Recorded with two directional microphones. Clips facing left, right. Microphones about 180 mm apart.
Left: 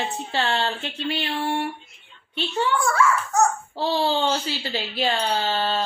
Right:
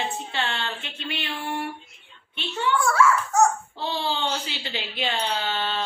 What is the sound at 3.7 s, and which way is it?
Speech, 40° left (ahead or behind).